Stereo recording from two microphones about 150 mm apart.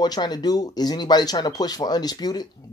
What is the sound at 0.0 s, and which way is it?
Speech, 25° left (ahead or behind).